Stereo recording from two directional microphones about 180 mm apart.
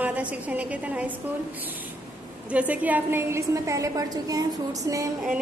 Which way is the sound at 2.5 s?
10° right (ahead or behind).